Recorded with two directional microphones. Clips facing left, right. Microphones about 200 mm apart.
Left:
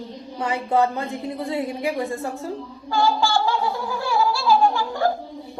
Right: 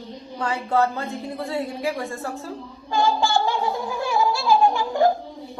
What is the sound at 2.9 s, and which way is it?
Gargling, 20° right (ahead or behind).